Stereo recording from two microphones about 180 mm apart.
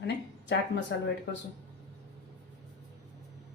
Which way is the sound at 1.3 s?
75° left (ahead or behind).